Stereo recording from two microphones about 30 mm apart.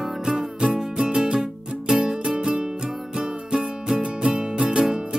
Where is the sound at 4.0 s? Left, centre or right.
Right.